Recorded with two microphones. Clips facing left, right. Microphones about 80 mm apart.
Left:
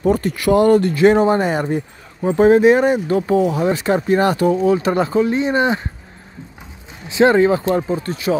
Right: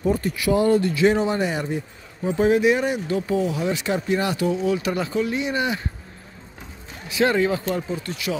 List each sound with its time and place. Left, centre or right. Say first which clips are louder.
0.0 s speech: left 5 dB; left
7.1 s speech: left 7 dB; left